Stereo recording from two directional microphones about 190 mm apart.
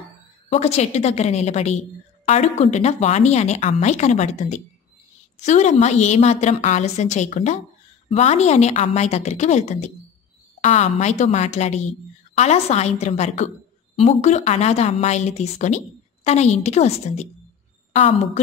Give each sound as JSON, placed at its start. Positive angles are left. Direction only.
{"t": 0.5, "sound": "a woman's voice", "side_deg": 35}